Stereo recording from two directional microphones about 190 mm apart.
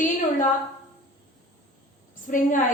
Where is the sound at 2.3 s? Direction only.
45° left (ahead or behind).